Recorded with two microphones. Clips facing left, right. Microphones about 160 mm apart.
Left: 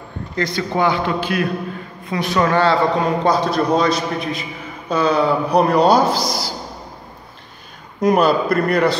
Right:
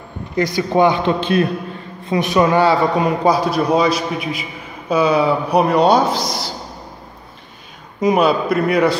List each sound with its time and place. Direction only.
0.4 s a man's voice: 15° right (ahead or behind); by 6.5 s centre (ahead or behind)
8.0 s a man's voice: centre (ahead or behind)